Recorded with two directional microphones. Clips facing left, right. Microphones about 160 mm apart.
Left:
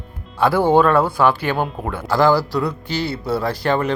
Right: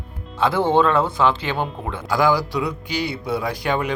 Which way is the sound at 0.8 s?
20° right (ahead or behind).